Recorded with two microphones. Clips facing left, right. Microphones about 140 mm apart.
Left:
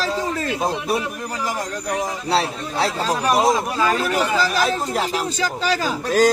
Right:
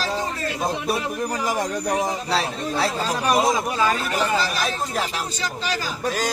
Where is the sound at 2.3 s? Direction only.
30° left (ahead or behind).